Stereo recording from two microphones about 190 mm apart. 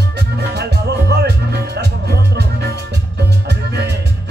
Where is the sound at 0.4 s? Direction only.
60° right (ahead or behind).